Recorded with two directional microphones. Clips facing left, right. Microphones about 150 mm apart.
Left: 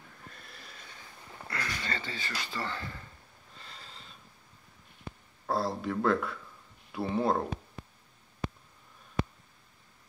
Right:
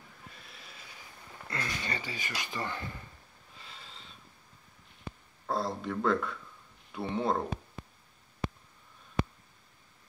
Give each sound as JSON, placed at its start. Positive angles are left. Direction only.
{"t": 0.3, "sound": "a sound", "side_deg": 0}
{"t": 1.5, "sound": "speech", "side_deg": -20}
{"t": 3.5, "sound": "snort", "side_deg": 0}
{"t": 5.5, "sound": "speech", "side_deg": 5}